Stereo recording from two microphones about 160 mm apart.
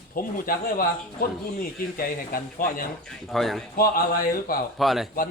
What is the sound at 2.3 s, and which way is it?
Speech, 65° left (ahead or behind).